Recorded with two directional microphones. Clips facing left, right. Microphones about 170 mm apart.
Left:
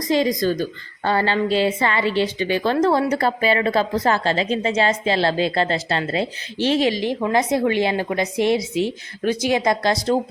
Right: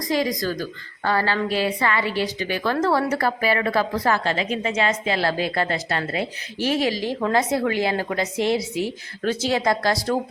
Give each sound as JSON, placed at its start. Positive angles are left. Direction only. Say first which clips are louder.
{"t": 0.0, "sound": "a woman's voice", "louder": "left 4 dB", "side_deg": 25}